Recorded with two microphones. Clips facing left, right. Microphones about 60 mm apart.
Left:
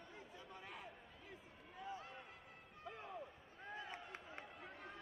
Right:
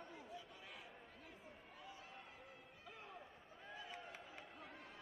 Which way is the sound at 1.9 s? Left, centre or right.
Left.